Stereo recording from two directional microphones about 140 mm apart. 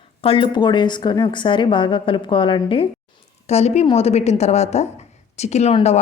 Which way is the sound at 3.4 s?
50° left (ahead or behind).